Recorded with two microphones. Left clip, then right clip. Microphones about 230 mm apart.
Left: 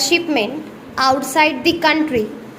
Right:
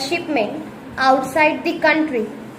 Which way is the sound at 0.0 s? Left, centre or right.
Left.